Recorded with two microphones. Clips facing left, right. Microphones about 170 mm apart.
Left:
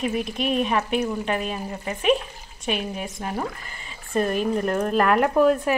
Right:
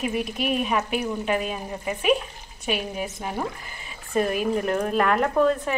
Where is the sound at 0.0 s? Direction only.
5° right (ahead or behind).